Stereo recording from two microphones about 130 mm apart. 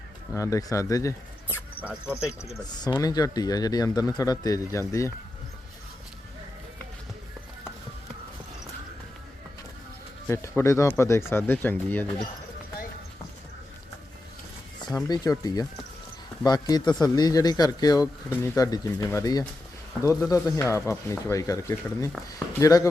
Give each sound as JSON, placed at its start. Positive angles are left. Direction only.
{"t": 0.3, "sound": "speech", "side_deg": 25}
{"t": 1.8, "sound": "speech", "side_deg": -10}
{"t": 2.2, "sound": "speech", "side_deg": 20}
{"t": 10.2, "sound": "speech", "side_deg": 20}
{"t": 14.8, "sound": "speech", "side_deg": 30}